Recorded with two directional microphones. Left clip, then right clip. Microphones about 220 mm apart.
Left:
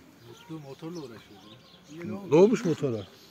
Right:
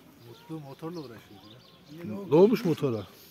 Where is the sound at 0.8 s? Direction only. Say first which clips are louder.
Right 2 dB; 50° right (ahead or behind).